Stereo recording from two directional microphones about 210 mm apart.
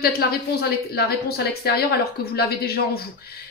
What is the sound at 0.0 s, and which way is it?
A woman's voice, 45° left (ahead or behind).